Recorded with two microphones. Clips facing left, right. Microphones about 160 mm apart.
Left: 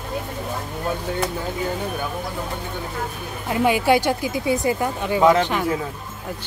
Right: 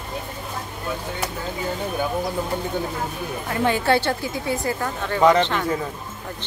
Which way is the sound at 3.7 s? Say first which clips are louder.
Left 2 dB; 10° left (ahead or behind).